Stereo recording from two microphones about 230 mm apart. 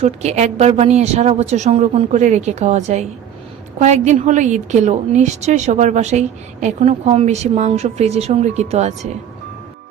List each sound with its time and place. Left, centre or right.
0.0 s a woman's voice: right